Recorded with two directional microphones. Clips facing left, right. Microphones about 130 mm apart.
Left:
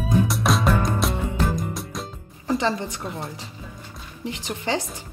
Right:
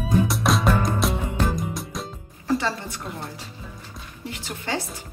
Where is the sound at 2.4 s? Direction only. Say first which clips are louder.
Left 1 dB; 15° left (ahead or behind).